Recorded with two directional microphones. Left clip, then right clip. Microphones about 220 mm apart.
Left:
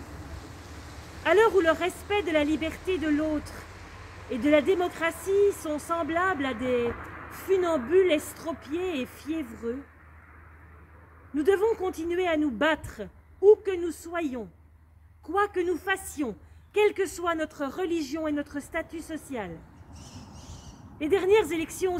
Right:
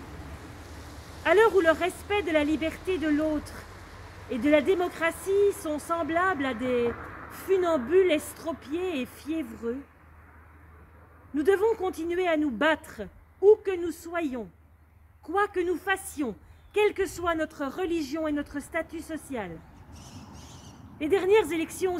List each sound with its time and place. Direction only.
1.2 s speech: centre (ahead or behind)
11.3 s speech: centre (ahead or behind)
20.0 s a sound: 30° right (ahead or behind)
21.0 s speech: centre (ahead or behind)